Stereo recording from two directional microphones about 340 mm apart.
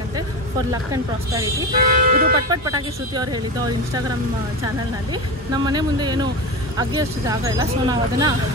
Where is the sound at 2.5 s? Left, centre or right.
Centre.